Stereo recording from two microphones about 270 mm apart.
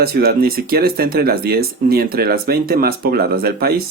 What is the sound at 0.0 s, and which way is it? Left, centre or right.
Speech, right.